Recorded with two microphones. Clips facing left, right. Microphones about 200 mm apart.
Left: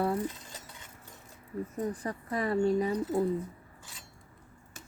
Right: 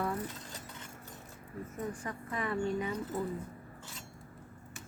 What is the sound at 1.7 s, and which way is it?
A woman's voice, 35° left (ahead or behind).